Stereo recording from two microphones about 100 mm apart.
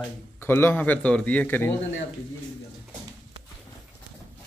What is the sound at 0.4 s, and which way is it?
Speech, 25° left (ahead or behind).